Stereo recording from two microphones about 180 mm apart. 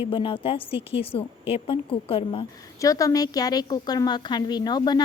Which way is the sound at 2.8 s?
20° left (ahead or behind).